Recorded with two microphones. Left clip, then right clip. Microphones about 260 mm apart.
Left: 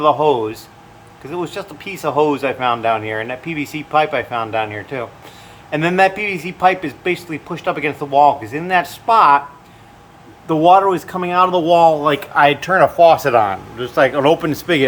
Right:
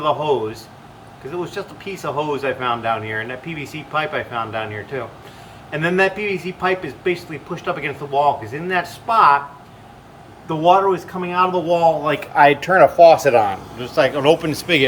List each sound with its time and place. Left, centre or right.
0.0 s speech: centre
10.7 s speech: left